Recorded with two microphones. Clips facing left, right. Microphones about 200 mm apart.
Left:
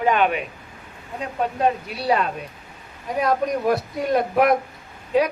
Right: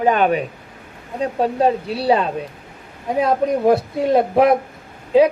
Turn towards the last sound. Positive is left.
turn(degrees=-30)  # may be behind; listen again after turning